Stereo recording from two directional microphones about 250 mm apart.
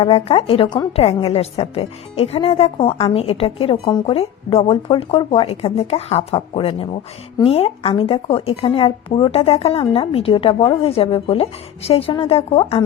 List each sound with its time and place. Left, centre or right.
0.0 s a woman's voice: left